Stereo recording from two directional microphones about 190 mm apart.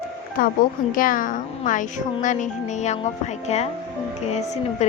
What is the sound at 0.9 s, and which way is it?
A child's voice, 45° left (ahead or behind).